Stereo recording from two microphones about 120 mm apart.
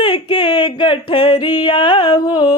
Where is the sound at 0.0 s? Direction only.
45° left (ahead or behind).